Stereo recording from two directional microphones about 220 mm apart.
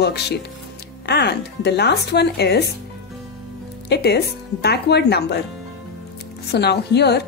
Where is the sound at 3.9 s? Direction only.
50° left (ahead or behind).